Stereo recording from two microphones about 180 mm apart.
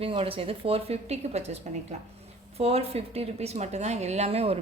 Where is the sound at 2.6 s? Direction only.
35° right (ahead or behind).